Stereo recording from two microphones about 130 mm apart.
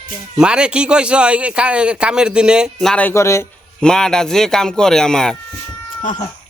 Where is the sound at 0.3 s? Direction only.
5° right (ahead or behind).